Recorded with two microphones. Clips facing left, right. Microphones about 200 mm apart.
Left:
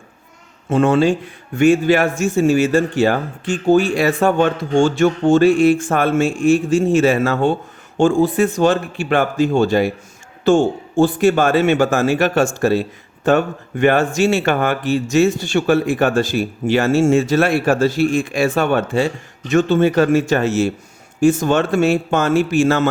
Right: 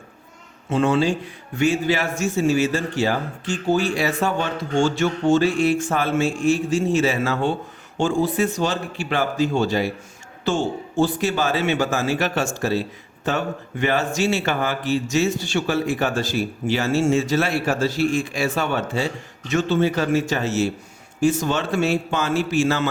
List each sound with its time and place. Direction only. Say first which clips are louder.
0.7 s a man's voice: left 5 dB; 50° left (ahead or behind)